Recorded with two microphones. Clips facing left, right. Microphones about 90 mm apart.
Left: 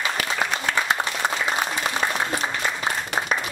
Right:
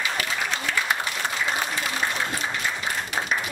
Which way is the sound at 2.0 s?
90° left.